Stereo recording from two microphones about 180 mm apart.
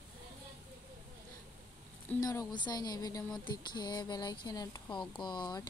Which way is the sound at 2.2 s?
20° left (ahead or behind).